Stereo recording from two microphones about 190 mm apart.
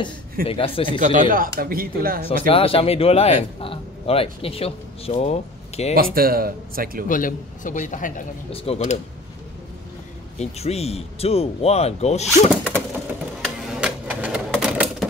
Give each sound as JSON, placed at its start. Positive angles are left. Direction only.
{"t": 0.5, "sound": "speech", "side_deg": 30}
{"t": 0.8, "sound": "speech", "side_deg": -45}
{"t": 2.2, "sound": "a man's voice", "side_deg": 30}
{"t": 5.9, "sound": "speech", "side_deg": -50}
{"t": 7.1, "sound": "a man's voice", "side_deg": 45}
{"t": 10.4, "sound": "a man's voice", "side_deg": 35}
{"t": 13.4, "sound": "typewriter", "side_deg": -5}